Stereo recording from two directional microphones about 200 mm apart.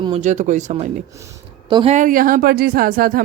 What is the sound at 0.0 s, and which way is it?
Speech, 30° right (ahead or behind).